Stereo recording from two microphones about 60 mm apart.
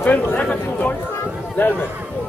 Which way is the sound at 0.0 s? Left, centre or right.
Left.